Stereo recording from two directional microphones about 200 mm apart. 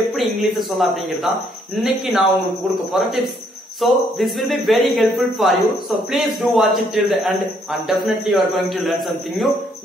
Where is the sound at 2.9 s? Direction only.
5° right (ahead or behind).